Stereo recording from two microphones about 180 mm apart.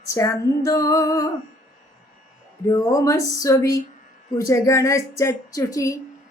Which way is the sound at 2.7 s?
20° left (ahead or behind).